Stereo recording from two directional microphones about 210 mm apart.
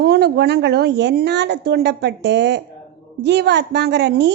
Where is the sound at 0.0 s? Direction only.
50° right (ahead or behind).